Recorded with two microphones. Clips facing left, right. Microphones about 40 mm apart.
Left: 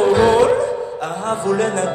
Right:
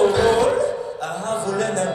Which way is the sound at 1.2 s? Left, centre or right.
Left.